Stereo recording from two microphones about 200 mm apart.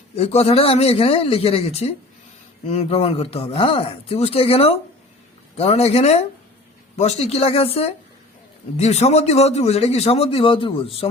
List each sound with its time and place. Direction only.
0.2 s a man's voice: 30° left (ahead or behind)